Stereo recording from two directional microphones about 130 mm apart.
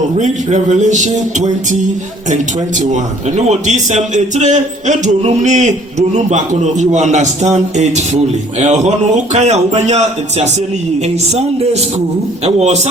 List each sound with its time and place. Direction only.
0.2 s a man's voice: 65° right (ahead or behind)